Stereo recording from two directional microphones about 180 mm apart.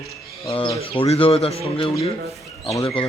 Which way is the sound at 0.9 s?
30° left (ahead or behind).